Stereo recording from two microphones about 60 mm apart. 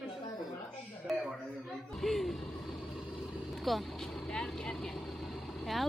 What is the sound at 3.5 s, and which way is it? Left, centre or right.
Speech, centre.